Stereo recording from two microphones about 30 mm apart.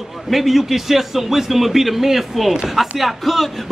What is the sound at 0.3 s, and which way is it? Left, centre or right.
A man's voice, centre.